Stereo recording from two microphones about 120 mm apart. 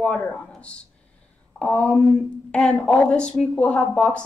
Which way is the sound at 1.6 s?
10° left (ahead or behind).